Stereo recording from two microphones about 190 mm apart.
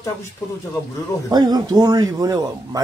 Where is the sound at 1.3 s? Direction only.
20° right (ahead or behind).